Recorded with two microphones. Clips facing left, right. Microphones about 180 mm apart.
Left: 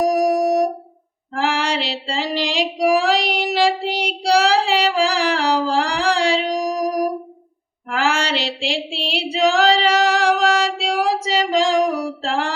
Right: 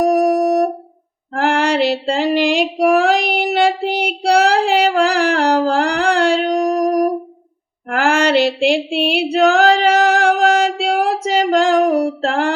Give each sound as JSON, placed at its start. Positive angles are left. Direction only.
{"t": 0.0, "sound": "music", "side_deg": -55}
{"t": 1.4, "sound": "female singing", "side_deg": -55}
{"t": 7.9, "sound": "a sound", "side_deg": -55}